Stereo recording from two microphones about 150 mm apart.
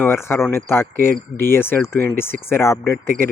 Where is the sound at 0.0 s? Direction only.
15° left (ahead or behind).